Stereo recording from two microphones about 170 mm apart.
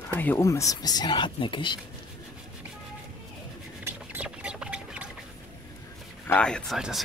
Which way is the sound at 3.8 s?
10° right (ahead or behind).